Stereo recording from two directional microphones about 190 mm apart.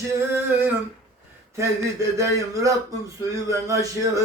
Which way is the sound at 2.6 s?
15° right (ahead or behind).